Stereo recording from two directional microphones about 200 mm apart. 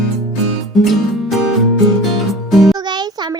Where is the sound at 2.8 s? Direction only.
20° right (ahead or behind).